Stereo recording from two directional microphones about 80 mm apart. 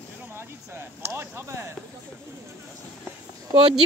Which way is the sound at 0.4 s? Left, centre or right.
Right.